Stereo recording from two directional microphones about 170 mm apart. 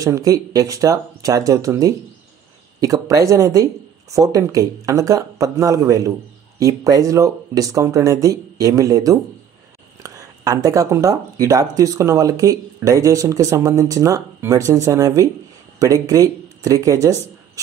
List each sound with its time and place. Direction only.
0.0 s speech: 20° right (ahead or behind)